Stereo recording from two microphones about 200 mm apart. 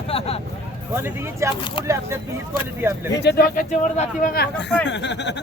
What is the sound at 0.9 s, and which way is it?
Speech, 10° right (ahead or behind).